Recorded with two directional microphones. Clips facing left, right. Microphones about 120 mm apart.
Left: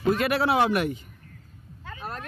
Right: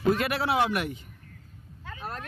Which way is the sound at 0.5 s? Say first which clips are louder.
Left 2 dB; 50° left (ahead or behind).